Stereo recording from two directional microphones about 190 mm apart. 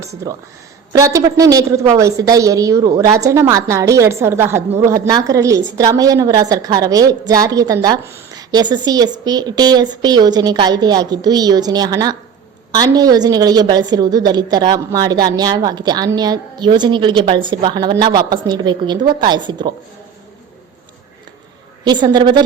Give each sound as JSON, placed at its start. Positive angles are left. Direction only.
{"t": 0.2, "sound": "a woman's voice", "side_deg": -15}
{"t": 21.8, "sound": "a woman's voice", "side_deg": -25}